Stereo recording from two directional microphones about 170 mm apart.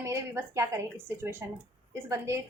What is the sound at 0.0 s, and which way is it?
Speech, 15° right (ahead or behind).